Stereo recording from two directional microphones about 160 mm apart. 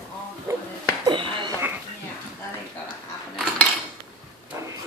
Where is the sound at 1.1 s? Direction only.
30° right (ahead or behind).